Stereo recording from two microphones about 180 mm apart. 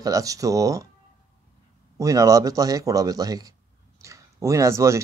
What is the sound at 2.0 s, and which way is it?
A man's voice, 20° right (ahead or behind).